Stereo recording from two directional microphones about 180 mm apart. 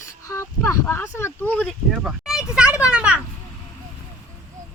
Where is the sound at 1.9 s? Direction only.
5° right (ahead or behind).